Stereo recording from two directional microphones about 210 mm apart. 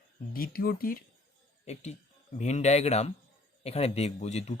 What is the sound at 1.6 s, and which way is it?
Speech, 30° left (ahead or behind).